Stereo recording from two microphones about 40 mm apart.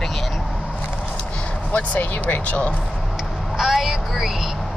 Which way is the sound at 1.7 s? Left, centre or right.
Left.